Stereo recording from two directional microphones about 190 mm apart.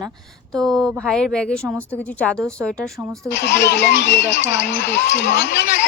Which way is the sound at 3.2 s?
65° left (ahead or behind).